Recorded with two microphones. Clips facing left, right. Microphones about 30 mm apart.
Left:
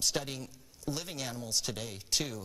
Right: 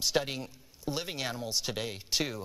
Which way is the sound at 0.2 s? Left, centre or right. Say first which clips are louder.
Right 4 dB; right.